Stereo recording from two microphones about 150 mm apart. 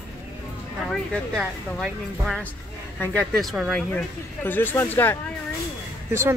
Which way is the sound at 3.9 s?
15° left (ahead or behind).